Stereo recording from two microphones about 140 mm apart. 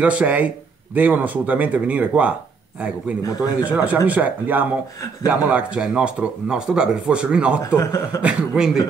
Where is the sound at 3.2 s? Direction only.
25° left (ahead or behind).